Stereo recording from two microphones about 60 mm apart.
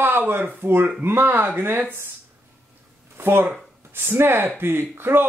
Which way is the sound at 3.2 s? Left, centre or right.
Right.